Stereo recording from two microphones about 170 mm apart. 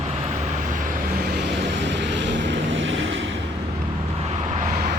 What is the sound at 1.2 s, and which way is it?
Vehicle, 85° right.